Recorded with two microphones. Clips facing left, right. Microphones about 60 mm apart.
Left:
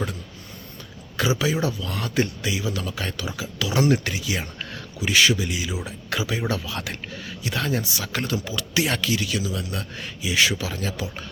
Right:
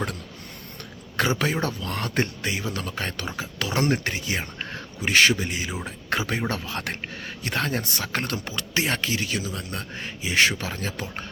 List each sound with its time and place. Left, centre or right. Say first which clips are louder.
1.4 s speech: left 2 dB; right